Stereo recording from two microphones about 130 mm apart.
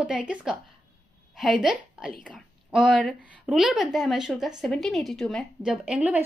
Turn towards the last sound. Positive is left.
turn(degrees=-10)  # may be behind; listen again after turning